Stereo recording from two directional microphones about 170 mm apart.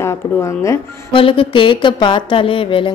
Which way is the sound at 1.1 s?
30° left (ahead or behind).